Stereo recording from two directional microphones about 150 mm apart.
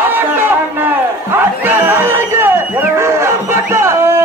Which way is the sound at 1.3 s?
15° right (ahead or behind).